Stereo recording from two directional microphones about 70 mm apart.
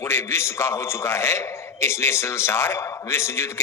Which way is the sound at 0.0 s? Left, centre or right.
Left.